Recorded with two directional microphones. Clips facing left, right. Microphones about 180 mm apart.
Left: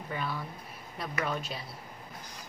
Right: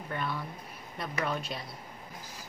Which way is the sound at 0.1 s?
Centre (ahead or behind).